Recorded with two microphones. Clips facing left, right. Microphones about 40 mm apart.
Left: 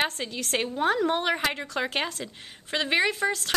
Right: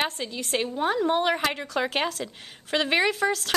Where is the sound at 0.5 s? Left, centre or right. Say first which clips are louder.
Even; centre.